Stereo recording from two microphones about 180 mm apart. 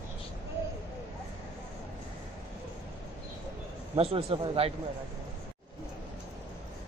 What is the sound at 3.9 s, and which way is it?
Speech, 30° right (ahead or behind).